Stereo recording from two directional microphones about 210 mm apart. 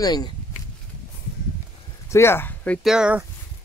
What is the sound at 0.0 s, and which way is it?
Speech, 20° left (ahead or behind).